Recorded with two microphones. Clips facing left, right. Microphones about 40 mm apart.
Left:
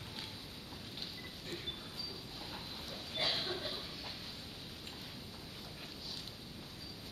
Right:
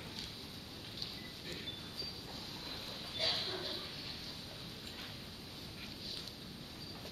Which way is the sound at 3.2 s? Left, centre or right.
Left.